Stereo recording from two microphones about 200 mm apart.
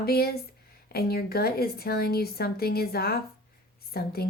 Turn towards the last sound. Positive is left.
turn(degrees=50)  # may be behind; listen again after turning